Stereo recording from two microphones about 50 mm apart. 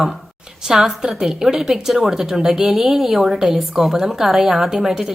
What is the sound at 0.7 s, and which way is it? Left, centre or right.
A woman's voice, centre.